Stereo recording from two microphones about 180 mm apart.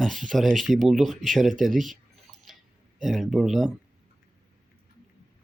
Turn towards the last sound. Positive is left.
turn(degrees=0)  # may be behind; listen again after turning